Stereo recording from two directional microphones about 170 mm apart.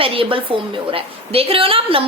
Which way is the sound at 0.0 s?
30° right (ahead or behind).